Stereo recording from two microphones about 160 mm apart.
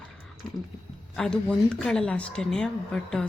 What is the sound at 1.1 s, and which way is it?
Speech, 5° left (ahead or behind).